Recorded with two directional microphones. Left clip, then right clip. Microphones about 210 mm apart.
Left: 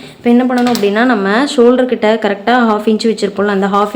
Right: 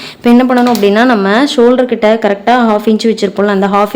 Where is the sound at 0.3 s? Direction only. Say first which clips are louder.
Right 3 dB; 30° right (ahead or behind).